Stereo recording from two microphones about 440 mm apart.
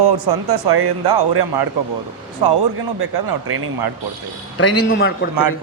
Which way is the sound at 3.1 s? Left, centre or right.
Right.